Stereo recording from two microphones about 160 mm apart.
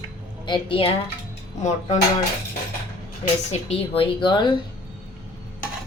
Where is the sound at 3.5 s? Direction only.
40° left (ahead or behind).